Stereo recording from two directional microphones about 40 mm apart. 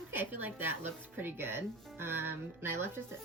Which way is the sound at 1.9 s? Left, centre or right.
Right.